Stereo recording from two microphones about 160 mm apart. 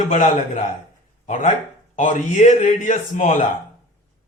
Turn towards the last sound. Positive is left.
turn(degrees=50)  # may be behind; listen again after turning